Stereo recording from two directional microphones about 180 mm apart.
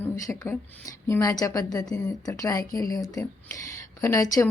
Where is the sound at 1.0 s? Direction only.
20° left (ahead or behind).